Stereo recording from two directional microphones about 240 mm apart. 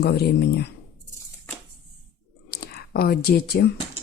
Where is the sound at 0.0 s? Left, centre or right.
Left.